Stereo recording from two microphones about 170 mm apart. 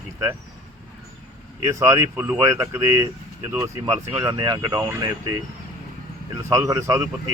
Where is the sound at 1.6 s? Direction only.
15° right (ahead or behind).